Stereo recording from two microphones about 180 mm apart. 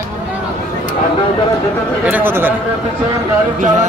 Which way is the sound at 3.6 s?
45° right (ahead or behind).